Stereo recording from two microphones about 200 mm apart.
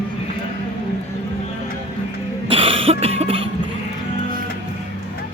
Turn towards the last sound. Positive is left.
turn(degrees=-30)  # may be behind; listen again after turning